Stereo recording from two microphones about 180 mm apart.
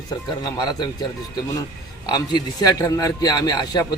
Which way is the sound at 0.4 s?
20° left (ahead or behind).